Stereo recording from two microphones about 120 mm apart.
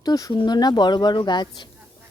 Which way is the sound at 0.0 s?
35° left (ahead or behind).